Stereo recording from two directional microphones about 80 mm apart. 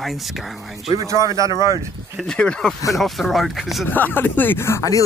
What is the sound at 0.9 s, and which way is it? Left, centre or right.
Speech, right.